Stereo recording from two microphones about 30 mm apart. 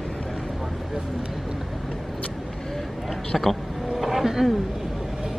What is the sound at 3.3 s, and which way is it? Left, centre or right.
Speech, centre.